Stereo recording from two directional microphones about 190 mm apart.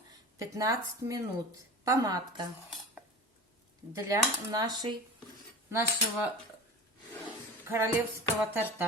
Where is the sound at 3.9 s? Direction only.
15° right (ahead or behind).